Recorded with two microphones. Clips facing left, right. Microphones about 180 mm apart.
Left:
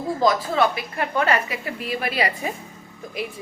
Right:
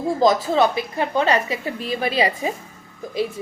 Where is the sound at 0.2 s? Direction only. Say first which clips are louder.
Right 3 dB; 25° right (ahead or behind).